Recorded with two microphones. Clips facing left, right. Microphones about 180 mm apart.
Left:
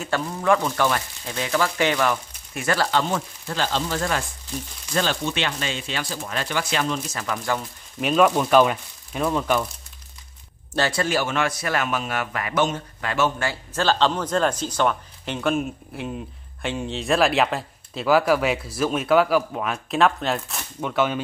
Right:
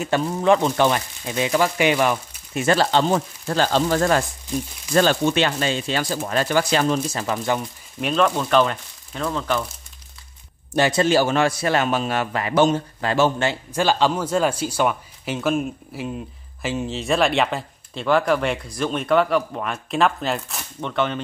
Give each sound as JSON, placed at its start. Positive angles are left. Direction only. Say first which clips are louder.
{"t": 0.0, "sound": "a man's voice", "louder": "right 4 dB", "side_deg": -20}
{"t": 8.0, "sound": "speech", "louder": "left 2 dB", "side_deg": 10}
{"t": 10.7, "sound": "a man's voice", "louder": "right 5 dB", "side_deg": -20}